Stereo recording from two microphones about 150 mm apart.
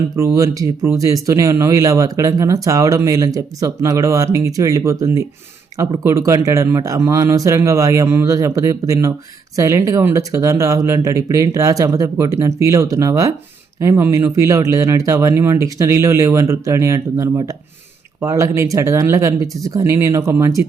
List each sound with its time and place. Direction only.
0.3 s speech: 20° right (ahead or behind)